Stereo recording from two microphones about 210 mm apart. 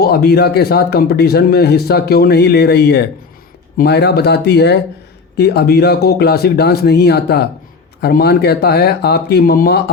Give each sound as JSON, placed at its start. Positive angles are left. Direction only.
{"t": 0.0, "sound": "speech", "side_deg": 50}